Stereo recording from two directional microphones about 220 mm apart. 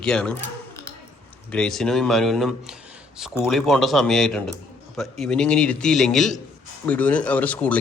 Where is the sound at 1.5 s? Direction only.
Centre (ahead or behind).